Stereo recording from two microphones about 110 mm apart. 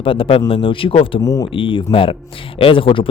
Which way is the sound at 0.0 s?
55° left (ahead or behind).